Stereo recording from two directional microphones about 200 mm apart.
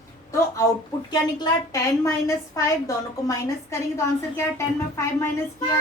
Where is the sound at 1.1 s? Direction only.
20° left (ahead or behind).